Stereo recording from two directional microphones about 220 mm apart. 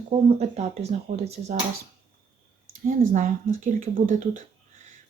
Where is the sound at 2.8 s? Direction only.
35° right (ahead or behind).